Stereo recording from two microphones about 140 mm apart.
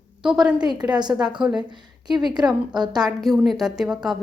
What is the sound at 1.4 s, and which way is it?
Speech, 5° right (ahead or behind).